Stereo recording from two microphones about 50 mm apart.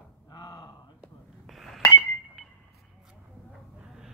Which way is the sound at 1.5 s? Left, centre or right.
Centre.